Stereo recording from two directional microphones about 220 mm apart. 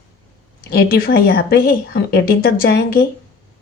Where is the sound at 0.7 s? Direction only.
45° left (ahead or behind).